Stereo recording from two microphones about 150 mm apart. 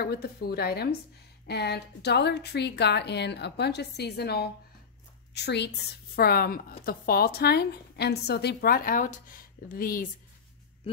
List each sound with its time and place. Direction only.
0.0 s a woman's voice: 90° left; by 10.0 s 70° left (ahead or behind)